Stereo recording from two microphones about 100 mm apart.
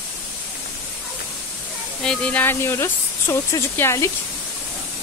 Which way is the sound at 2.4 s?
25° left (ahead or behind).